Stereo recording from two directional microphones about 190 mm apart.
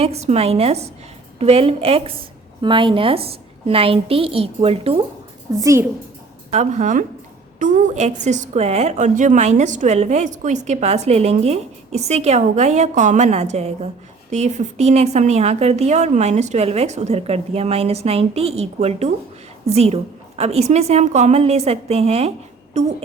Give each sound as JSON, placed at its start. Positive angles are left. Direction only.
{"t": 0.0, "sound": "a woman's voice", "side_deg": -35}
{"t": 5.5, "sound": "a woman's voice", "side_deg": -15}
{"t": 6.5, "sound": "a woman's voice", "side_deg": -40}